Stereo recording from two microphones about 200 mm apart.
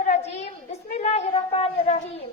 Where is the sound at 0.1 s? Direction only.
35° left (ahead or behind).